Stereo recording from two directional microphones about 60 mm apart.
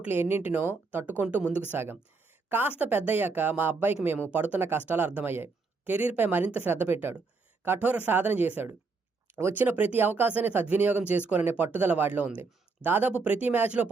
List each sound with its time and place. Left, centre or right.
0.1 s speech: right
2.5 s a woman's voice: right
4.3 s speech: right